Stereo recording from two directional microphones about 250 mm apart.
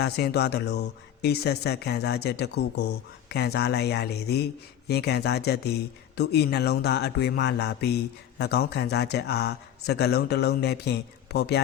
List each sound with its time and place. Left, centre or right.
0.0 s speech: left